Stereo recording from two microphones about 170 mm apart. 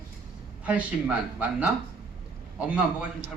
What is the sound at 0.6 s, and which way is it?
A man's voice, 10° right (ahead or behind).